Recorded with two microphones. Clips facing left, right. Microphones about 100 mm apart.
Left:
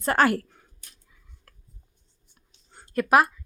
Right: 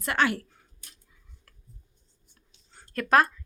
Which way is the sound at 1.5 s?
50° left (ahead or behind).